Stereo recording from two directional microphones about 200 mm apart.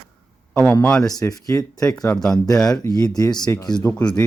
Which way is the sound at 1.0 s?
15° left (ahead or behind).